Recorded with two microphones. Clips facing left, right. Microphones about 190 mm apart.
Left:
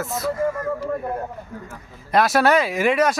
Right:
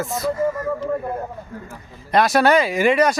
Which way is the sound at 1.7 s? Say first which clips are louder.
Right 1 dB; 5° left (ahead or behind).